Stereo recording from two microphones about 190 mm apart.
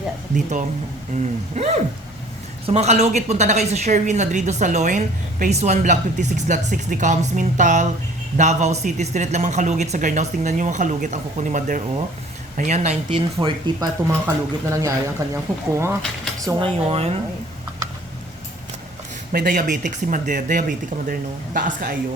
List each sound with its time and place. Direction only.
1.6 s a woman's voice: 35° right (ahead or behind); by 16.0 s 15° right (ahead or behind)
16.5 s speech: 25° right (ahead or behind)
19.3 s speech: 50° right (ahead or behind)